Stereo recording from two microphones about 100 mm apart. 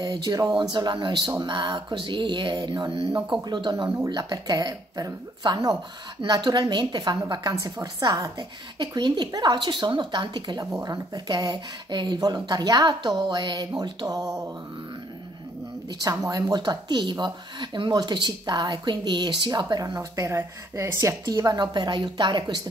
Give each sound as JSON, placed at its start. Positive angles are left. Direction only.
{"t": 0.0, "sound": "a woman's voice", "side_deg": -40}
{"t": 16.0, "sound": "speech", "side_deg": -40}
{"t": 21.3, "sound": "speech", "side_deg": -40}